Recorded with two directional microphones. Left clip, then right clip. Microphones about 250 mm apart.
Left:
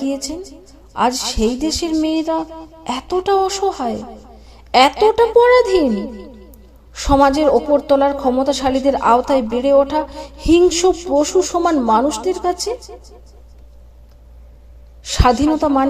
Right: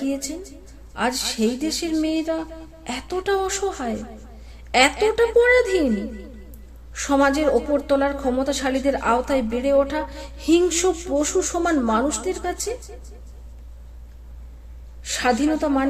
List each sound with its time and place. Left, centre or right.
0.0 s a woman's voice: centre
15.0 s a woman's voice: left